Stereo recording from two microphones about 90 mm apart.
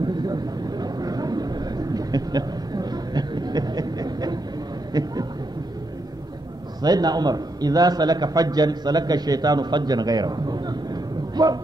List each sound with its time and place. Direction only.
0.0 s vehicle: 50° right (ahead or behind)
4.9 s a sound: 45° right (ahead or behind)
6.8 s a man's voice: 50° right (ahead or behind)